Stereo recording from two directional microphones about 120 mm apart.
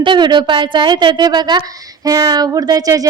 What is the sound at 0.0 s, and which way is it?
Child singing, 40° right (ahead or behind).